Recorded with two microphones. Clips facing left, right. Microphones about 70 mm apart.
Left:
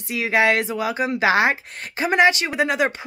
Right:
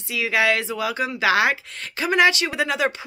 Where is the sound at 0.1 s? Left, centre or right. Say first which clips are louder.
Left 2 dB; left.